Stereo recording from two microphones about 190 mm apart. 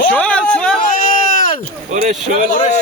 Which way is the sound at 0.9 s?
45° left (ahead or behind).